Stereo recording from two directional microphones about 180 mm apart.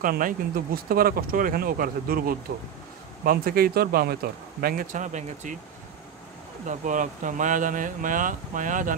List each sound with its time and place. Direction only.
0.0 s speech: 50° right (ahead or behind)
6.6 s speech: 45° right (ahead or behind)